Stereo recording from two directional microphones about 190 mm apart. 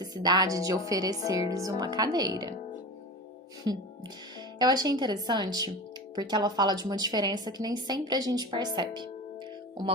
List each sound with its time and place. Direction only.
0.0 s a woman's voice: 20° right (ahead or behind)
3.7 s a woman's voice: 25° right (ahead or behind)